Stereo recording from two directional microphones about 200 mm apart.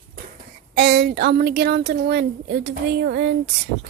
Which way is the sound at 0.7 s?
55° right (ahead or behind).